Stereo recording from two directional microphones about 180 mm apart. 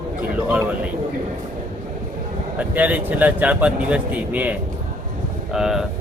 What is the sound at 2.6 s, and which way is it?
Speech, 10° right (ahead or behind).